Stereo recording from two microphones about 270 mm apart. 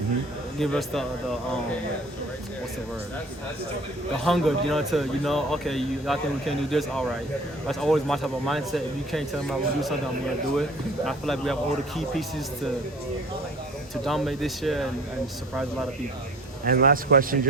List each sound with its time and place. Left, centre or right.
0.6 s speech: centre
4.2 s speech: centre
13.9 s speech: centre
16.6 s a man's voice: right